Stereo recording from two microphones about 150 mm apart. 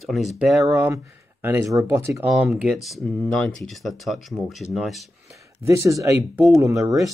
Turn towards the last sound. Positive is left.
turn(degrees=-20)  # may be behind; listen again after turning